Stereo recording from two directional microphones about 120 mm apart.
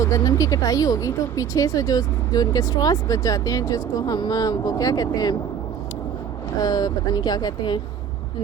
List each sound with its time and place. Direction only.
0.0 s speech: 30° left (ahead or behind)
6.6 s speech: 35° left (ahead or behind)